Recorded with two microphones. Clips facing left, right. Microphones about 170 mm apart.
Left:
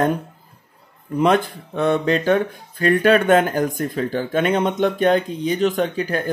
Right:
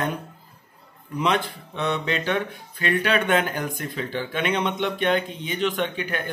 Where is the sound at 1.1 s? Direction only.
50° left (ahead or behind).